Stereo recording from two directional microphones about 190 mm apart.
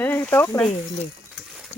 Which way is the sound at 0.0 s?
10° left (ahead or behind).